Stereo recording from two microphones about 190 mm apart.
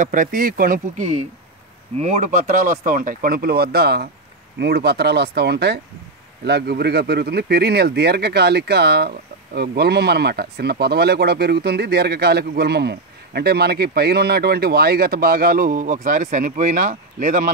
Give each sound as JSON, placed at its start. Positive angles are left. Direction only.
{"t": 0.0, "sound": "speech", "side_deg": -45}